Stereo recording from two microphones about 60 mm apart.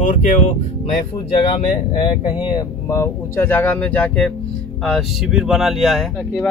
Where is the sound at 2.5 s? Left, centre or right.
Left.